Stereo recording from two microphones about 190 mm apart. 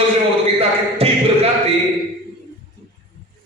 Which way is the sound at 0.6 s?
30° right (ahead or behind).